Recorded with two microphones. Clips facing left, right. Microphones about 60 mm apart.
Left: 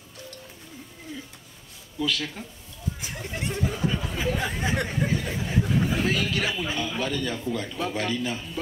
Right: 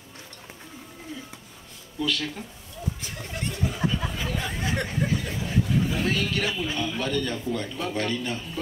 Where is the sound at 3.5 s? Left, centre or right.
Left.